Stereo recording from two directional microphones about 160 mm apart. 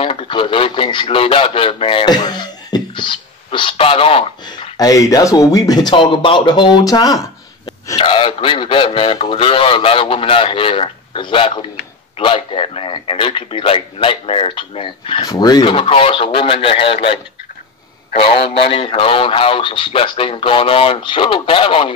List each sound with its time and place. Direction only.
0.0 s speech: 35° left (ahead or behind)